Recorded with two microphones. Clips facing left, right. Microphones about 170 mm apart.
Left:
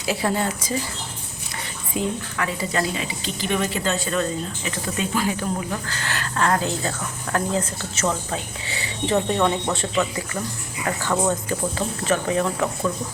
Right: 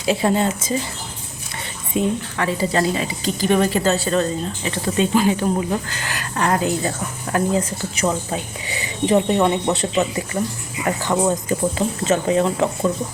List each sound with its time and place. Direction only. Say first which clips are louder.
0.0 s speech: right 5 dB; 25° right (ahead or behind)
1.9 s a woman's voice: right 5 dB; 30° right (ahead or behind)
5.9 s speech: right 1 dB; 15° right (ahead or behind)